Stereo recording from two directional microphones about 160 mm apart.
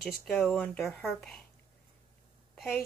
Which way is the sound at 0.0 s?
5° left (ahead or behind).